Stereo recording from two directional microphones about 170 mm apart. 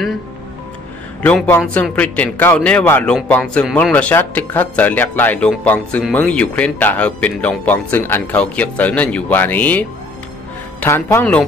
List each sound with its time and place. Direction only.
1.2 s speech: 10° left (ahead or behind)